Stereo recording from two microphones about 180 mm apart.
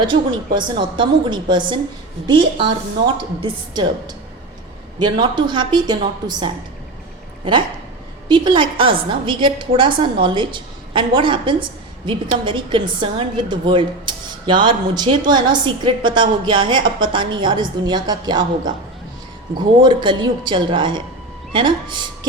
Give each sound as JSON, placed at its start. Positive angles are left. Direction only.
{"t": 0.1, "sound": "a woman's voice", "side_deg": -25}
{"t": 8.3, "sound": "a woman's voice", "side_deg": -25}